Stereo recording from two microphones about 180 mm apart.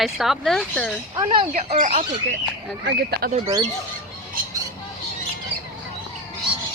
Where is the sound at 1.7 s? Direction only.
40° right (ahead or behind).